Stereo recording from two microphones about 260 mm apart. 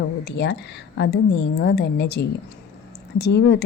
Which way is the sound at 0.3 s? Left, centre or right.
Left.